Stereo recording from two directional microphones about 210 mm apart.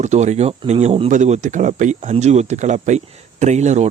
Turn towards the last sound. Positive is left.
turn(degrees=-35)  # may be behind; listen again after turning